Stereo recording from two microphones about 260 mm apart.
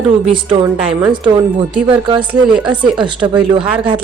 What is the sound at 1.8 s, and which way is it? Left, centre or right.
A woman's voice, centre.